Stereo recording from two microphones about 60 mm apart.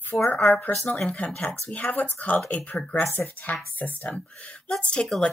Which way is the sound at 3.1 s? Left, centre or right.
Left.